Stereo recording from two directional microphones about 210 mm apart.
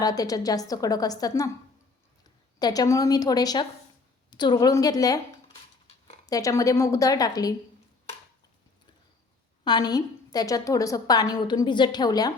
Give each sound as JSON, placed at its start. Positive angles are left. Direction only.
{"t": 0.0, "sound": "a woman's voice", "side_deg": 15}
{"t": 2.6, "sound": "a woman's voice", "side_deg": 20}
{"t": 6.2, "sound": "a woman's voice", "side_deg": 15}
{"t": 9.6, "sound": "a woman's voice", "side_deg": 20}